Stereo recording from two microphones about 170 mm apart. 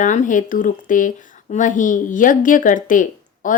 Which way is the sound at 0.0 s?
45° left (ahead or behind).